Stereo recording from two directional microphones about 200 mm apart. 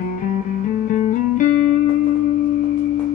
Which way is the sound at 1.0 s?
40° left (ahead or behind).